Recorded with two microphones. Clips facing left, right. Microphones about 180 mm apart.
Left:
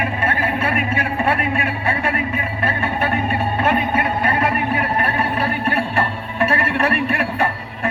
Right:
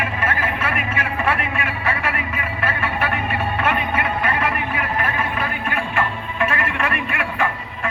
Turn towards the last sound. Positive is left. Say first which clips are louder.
# left 2 dB
turn(degrees=40)  # may be behind; listen again after turning